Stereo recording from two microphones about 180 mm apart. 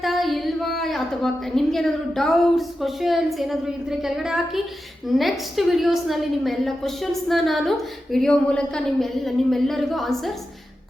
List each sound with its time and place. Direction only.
0.0 s singing: centre (ahead or behind)
0.8 s a woman's voice: centre (ahead or behind)